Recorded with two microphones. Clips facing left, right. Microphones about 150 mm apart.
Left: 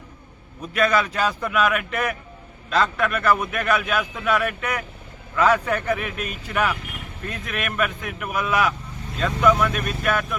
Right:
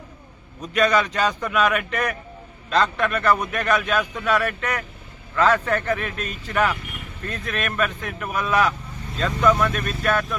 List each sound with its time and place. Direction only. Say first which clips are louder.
0.6 s a man's voice: right 1 dB; 5° left (ahead or behind)